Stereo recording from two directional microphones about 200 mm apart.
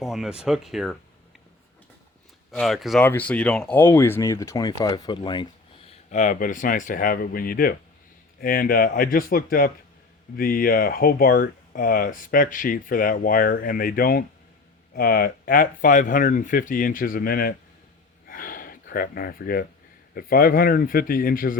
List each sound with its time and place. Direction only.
0.0 s speech: centre (ahead or behind)
2.5 s speech: centre (ahead or behind); by 17.5 s 45° left (ahead or behind)
18.3 s gasp: 45° left (ahead or behind)
20.1 s speech: 45° left (ahead or behind)